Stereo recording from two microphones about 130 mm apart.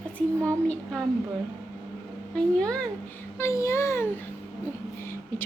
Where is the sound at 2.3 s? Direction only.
5° left (ahead or behind).